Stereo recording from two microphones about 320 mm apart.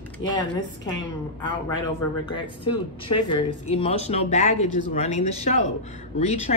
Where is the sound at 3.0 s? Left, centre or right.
Centre.